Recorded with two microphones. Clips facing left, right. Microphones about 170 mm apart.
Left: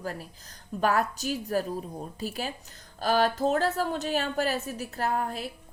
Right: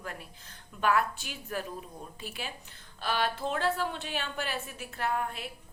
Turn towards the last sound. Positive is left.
turn(degrees=35)  # may be behind; listen again after turning